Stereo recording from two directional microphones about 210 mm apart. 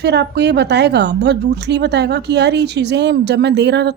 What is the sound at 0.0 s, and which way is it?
A woman's voice, 55° right (ahead or behind).